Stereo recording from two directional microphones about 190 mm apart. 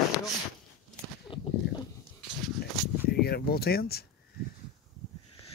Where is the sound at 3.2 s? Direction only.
55° left (ahead or behind).